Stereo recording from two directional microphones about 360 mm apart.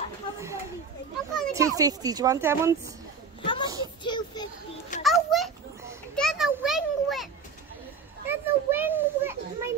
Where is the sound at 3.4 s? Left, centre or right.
Centre.